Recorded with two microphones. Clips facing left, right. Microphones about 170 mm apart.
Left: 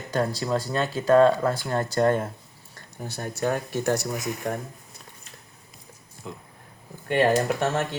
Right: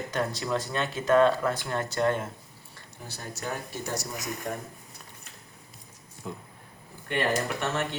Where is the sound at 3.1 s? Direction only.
55° left (ahead or behind).